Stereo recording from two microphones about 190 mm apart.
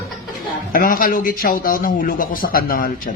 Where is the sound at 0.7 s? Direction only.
50° left (ahead or behind).